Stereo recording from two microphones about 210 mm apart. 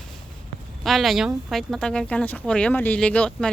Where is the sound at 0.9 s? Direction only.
Centre (ahead or behind).